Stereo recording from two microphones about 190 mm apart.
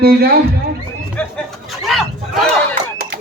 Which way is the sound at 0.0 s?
55° right (ahead or behind).